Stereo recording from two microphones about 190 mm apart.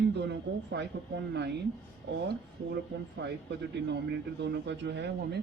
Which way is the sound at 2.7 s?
65° right (ahead or behind).